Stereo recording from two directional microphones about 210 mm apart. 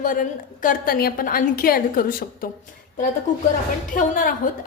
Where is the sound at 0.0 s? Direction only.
40° left (ahead or behind).